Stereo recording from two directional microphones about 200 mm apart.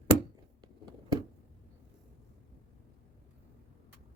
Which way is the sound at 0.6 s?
20° right (ahead or behind).